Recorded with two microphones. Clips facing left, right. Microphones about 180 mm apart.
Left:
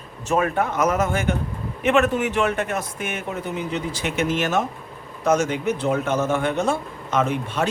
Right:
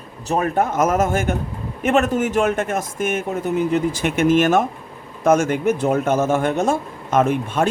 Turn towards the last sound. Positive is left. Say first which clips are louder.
# right 4 dB
turn(degrees=-50)  # may be behind; listen again after turning